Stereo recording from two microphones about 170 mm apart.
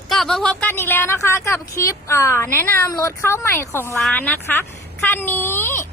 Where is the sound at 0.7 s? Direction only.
15° left (ahead or behind).